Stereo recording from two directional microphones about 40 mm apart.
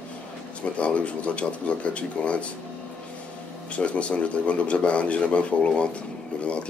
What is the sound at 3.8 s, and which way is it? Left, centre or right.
Speech, left.